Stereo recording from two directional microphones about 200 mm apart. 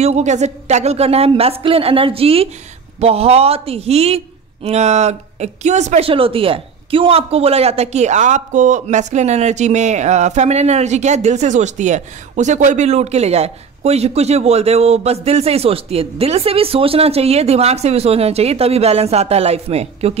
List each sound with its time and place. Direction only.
0.0 s speech: 35° right (ahead or behind)